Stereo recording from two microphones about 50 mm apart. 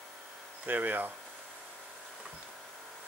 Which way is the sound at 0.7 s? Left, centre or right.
Right.